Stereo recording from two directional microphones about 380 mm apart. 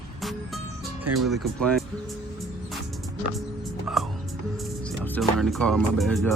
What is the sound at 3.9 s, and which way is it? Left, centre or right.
Music, centre.